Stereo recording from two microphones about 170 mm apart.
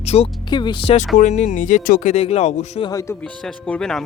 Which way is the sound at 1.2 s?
45° left (ahead or behind).